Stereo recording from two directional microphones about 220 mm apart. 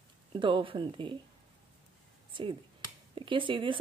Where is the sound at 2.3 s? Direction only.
20° right (ahead or behind).